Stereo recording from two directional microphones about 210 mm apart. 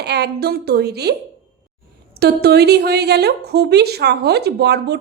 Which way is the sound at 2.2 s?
50° right (ahead or behind).